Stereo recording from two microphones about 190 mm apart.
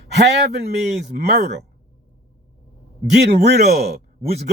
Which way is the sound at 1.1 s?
55° right (ahead or behind).